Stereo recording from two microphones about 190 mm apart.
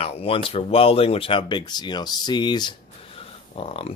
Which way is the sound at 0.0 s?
30° left (ahead or behind).